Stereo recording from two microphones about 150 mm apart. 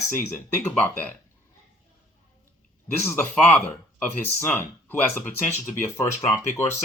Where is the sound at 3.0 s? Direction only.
15° left (ahead or behind).